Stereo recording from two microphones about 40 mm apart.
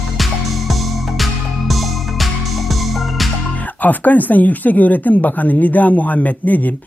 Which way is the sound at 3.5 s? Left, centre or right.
Left.